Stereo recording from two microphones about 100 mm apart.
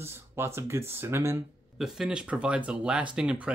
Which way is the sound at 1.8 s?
5° right (ahead or behind).